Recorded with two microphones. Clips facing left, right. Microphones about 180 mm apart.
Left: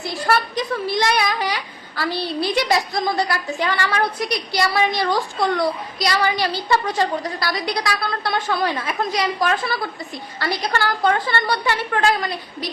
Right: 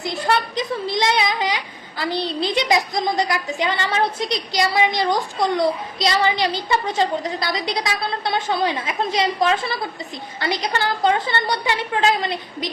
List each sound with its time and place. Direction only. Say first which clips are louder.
0.0 s speech: even; 20° right (ahead or behind)